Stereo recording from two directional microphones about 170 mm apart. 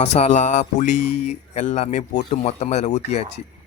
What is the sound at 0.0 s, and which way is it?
Speech, 40° left (ahead or behind).